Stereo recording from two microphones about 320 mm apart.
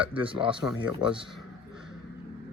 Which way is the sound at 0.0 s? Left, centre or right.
Centre.